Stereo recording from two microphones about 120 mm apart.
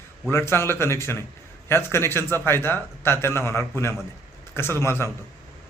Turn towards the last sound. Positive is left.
turn(degrees=20)  # may be behind; listen again after turning